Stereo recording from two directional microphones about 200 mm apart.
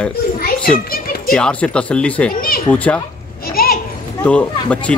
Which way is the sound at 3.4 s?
50° left (ahead or behind).